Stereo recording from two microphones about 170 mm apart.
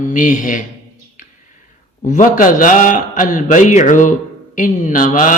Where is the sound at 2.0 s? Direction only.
50° left (ahead or behind).